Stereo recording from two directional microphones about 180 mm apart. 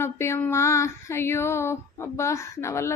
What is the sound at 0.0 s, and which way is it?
Speech, 15° left (ahead or behind).